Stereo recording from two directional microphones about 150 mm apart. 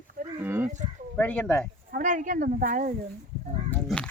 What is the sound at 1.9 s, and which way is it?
Speech, 60° right (ahead or behind).